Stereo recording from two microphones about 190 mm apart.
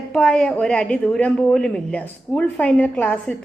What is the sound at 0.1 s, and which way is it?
A woman's voice, 5° left (ahead or behind).